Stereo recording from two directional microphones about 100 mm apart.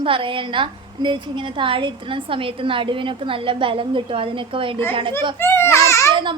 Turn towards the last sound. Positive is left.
turn(degrees=30)  # may be behind; listen again after turning